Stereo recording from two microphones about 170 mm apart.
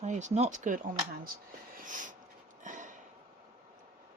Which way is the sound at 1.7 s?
50° right (ahead or behind).